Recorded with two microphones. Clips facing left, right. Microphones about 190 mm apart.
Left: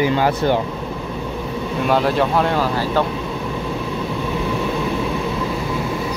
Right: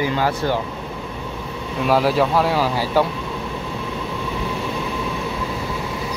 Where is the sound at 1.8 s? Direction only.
5° right (ahead or behind).